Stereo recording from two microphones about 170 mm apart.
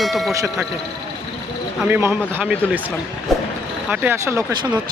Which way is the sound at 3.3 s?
Centre (ahead or behind).